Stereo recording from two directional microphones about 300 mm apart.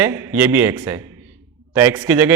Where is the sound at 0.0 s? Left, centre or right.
Centre.